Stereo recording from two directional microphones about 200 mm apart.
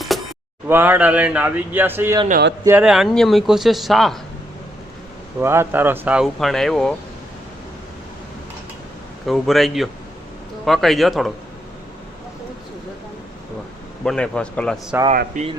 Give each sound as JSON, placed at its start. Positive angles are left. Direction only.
{"t": 0.1, "sound": "a sound", "side_deg": 0}
{"t": 0.7, "sound": "a man's voice", "side_deg": -10}
{"t": 5.4, "sound": "speech", "side_deg": -10}
{"t": 9.2, "sound": "speech", "side_deg": 0}
{"t": 14.0, "sound": "speech", "side_deg": 5}
{"t": 15.1, "sound": "speech", "side_deg": -40}